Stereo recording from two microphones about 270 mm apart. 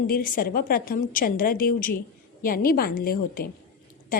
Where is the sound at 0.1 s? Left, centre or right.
Left.